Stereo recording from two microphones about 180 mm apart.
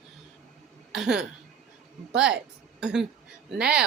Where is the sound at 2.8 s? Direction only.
5° right (ahead or behind).